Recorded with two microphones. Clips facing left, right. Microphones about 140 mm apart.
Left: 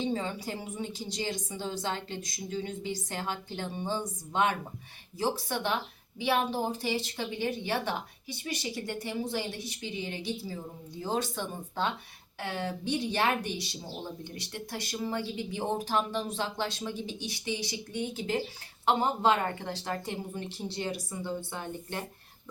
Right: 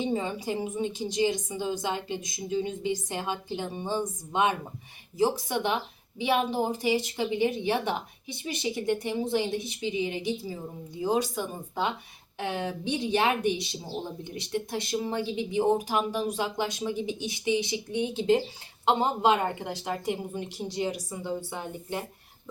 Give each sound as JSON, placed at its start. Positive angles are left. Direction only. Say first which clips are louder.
{"t": 0.0, "sound": "a woman's voice", "louder": "right 3 dB", "side_deg": -15}